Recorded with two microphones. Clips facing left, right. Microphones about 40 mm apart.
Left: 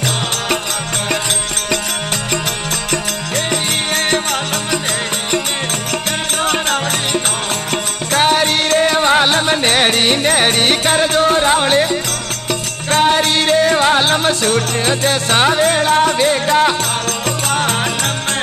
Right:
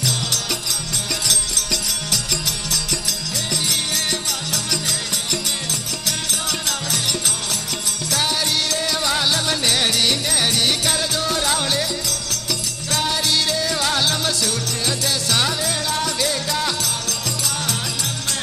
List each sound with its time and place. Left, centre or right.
3.9 s music: left
6.4 s music: left